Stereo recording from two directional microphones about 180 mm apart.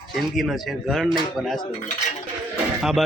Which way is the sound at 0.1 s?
Centre (ahead or behind).